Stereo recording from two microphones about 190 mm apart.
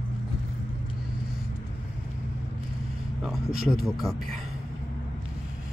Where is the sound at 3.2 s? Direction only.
Centre (ahead or behind).